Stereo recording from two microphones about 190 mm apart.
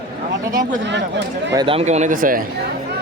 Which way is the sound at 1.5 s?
25° right (ahead or behind).